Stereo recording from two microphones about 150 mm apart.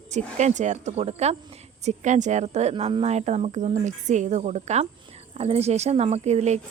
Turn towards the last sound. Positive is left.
turn(degrees=-45)  # may be behind; listen again after turning